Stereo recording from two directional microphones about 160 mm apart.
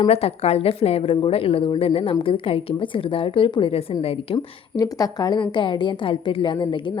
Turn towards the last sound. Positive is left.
turn(degrees=30)  # may be behind; listen again after turning